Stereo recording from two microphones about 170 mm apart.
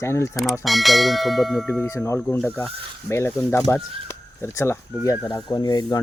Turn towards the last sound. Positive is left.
turn(degrees=25)  # may be behind; listen again after turning